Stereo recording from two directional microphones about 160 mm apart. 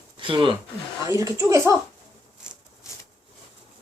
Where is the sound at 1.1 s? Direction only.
20° right (ahead or behind).